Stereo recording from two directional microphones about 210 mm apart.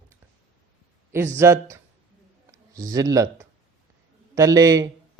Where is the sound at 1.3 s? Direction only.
15° right (ahead or behind).